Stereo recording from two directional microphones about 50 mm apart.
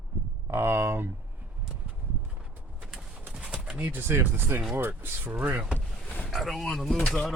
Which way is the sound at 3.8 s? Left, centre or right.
Right.